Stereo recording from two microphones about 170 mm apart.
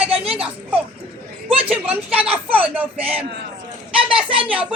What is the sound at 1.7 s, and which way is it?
A woman's voice, 10° right (ahead or behind).